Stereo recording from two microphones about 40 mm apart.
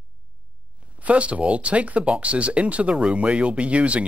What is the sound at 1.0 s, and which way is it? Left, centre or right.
Speech, right.